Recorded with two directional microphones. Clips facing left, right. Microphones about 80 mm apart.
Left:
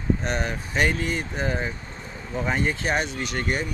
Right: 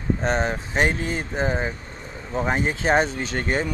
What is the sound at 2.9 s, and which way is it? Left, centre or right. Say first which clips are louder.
Speech: right 5 dB; right.